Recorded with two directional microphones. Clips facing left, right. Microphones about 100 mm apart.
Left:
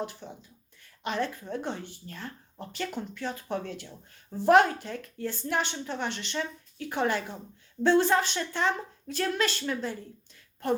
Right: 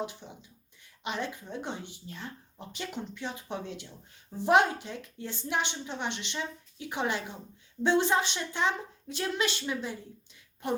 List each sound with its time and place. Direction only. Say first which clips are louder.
0.0 s a woman's voice: left 1 dB; 15° right (ahead or behind)